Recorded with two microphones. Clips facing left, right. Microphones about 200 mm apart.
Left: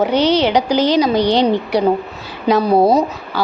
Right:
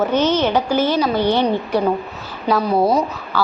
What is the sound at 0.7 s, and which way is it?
Speech, 90° left.